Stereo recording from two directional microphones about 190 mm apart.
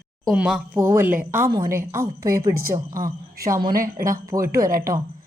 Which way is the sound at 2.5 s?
50° right (ahead or behind).